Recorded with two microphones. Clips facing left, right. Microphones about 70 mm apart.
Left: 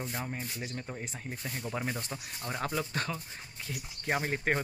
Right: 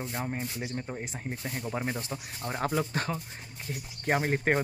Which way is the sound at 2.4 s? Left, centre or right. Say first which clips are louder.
Right 4 dB; right.